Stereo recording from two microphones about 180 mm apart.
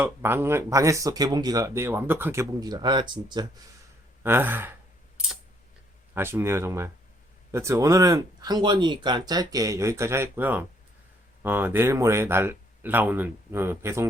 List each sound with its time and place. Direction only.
0.0 s speech: 10° right (ahead or behind)
4.2 s speech: 10° right (ahead or behind)
6.1 s speech: 15° right (ahead or behind)